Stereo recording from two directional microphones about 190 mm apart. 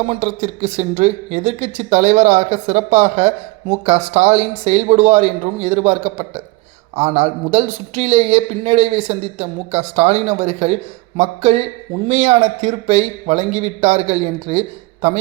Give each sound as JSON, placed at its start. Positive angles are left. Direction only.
{"t": 0.0, "sound": "a woman's voice", "side_deg": -35}